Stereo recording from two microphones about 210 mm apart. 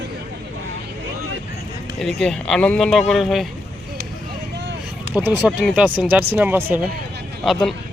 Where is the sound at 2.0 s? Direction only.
Centre (ahead or behind).